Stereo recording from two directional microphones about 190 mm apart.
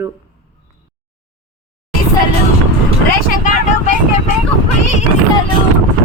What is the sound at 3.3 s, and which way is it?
Vehicle, 40° left (ahead or behind).